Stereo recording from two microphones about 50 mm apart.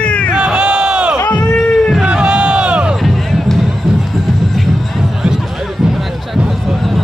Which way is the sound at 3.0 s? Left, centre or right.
Centre.